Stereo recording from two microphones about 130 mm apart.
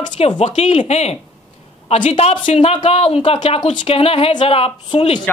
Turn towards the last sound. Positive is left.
turn(degrees=40)  # may be behind; listen again after turning